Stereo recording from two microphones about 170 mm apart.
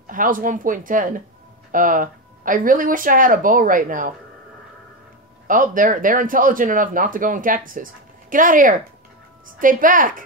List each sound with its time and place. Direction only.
0.0 s speech: 55° right (ahead or behind)
5.5 s speech: 55° right (ahead or behind)